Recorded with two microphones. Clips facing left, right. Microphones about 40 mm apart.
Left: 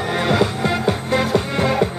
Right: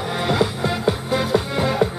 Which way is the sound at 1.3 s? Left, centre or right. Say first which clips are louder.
Left 1 dB; centre.